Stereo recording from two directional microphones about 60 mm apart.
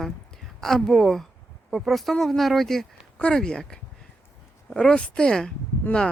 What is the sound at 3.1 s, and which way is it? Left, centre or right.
Speech, centre.